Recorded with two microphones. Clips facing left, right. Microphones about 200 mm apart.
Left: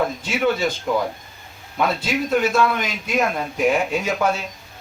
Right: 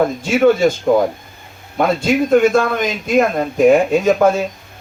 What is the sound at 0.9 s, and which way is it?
Speech, 55° right (ahead or behind).